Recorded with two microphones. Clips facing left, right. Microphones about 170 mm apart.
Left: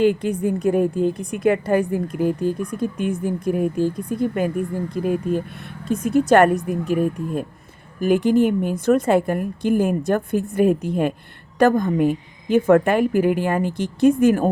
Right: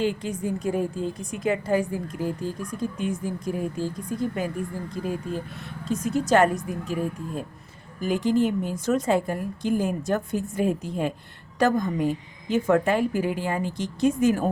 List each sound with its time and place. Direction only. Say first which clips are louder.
0.0 s a woman's voice: left 8 dB; 60° left (ahead or behind)